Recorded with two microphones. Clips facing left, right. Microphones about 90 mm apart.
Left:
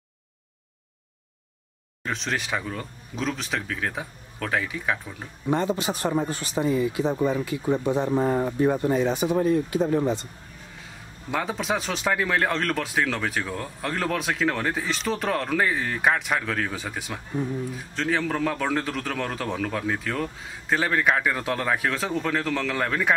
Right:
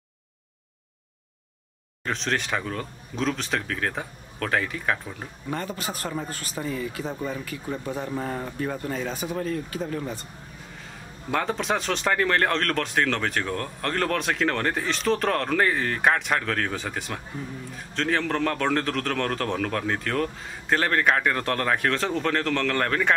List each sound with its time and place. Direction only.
2.0 s a man's voice: centre (ahead or behind)
5.5 s speech: 20° left (ahead or behind)
10.8 s a man's voice: 5° left (ahead or behind)